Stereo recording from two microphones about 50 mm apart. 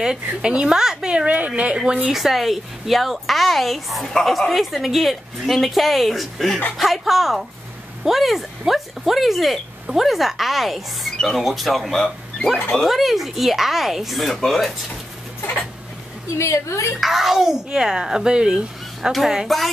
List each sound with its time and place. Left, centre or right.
0.0 s speech: centre
1.2 s a woman's voice: right
1.8 s a woman's voice: centre
2.1 s speech: centre
16.3 s a woman's voice: left
17.0 s speech: centre
19.1 s speech: centre